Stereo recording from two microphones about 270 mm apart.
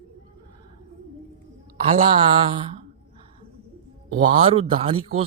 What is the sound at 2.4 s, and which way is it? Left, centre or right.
Speech, right.